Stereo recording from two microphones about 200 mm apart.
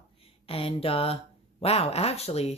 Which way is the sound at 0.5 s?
30° left (ahead or behind).